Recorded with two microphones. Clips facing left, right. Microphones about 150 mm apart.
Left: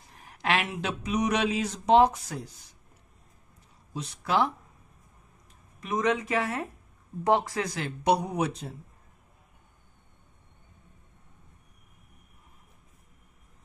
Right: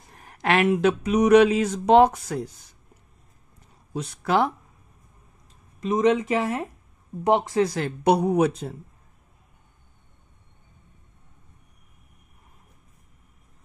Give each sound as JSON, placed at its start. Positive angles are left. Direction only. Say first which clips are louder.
{"t": 0.2, "sound": "speech", "louder": "right 7 dB", "side_deg": -50}
{"t": 3.9, "sound": "speech", "louder": "right 4 dB", "side_deg": -50}
{"t": 5.8, "sound": "speech", "louder": "right 7 dB", "side_deg": -25}
{"t": 7.7, "sound": "speech", "louder": "right 4 dB", "side_deg": -50}